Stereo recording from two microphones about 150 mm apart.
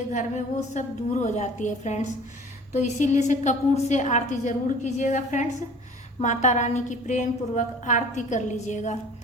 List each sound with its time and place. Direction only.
0.1 s a woman's voice: 55° left (ahead or behind)